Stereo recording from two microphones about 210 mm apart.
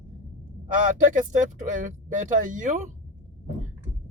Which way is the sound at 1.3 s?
40° right (ahead or behind).